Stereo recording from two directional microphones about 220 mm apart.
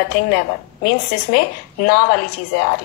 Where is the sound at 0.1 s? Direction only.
40° left (ahead or behind).